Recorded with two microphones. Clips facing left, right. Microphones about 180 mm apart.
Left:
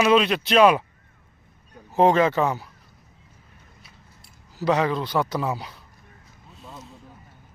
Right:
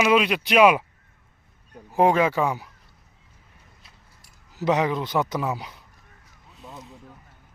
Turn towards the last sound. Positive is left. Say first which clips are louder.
# even
turn(degrees=-15)  # may be behind; listen again after turning